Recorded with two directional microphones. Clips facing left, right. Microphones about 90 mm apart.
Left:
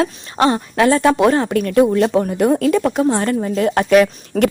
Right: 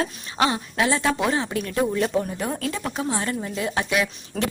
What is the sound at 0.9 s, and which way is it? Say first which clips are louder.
Speech: left 10 dB; 60° left (ahead or behind).